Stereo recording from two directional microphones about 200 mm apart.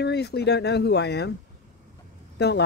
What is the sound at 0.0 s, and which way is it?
Speech, 55° left (ahead or behind).